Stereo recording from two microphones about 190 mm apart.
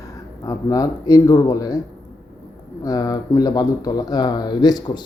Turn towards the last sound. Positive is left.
turn(degrees=20)  # may be behind; listen again after turning